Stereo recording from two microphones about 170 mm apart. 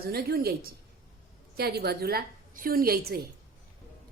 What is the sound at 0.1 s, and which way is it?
Speech, 65° right (ahead or behind).